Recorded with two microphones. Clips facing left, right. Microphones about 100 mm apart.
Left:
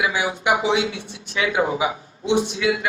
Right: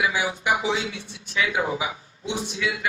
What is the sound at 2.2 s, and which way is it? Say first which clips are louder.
Speech: left 8 dB; 65° left (ahead or behind).